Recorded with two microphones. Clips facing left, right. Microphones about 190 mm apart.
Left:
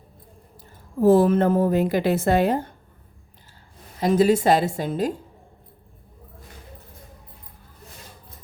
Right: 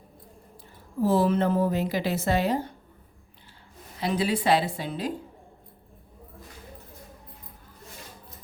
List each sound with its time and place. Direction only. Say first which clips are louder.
1.0 s a woman's voice: left 6 dB; 50° left (ahead or behind)
4.0 s a woman's voice: left 8 dB; 45° left (ahead or behind)